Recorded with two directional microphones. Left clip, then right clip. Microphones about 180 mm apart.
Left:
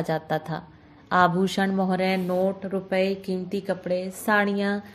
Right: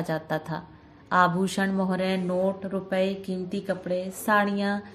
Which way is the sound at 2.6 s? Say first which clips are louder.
Left 2 dB; 30° left (ahead or behind).